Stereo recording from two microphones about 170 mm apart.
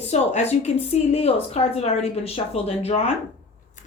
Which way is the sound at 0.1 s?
40° left (ahead or behind).